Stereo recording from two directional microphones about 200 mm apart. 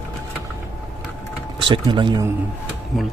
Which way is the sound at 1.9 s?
25° right (ahead or behind).